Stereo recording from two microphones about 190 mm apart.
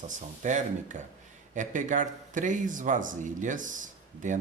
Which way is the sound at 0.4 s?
40° right (ahead or behind).